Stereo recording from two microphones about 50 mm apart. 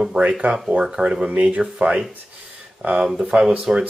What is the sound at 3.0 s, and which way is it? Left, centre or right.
Speech, centre.